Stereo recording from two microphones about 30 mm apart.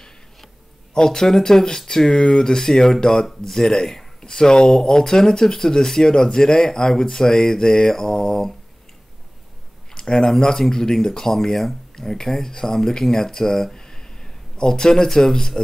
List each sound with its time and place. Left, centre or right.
0.9 s speech: left
4.6 s speech: centre
9.9 s speech: left
11.9 s speech: centre